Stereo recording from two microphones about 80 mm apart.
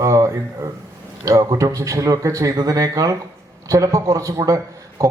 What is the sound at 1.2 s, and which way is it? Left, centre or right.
A man's voice, right.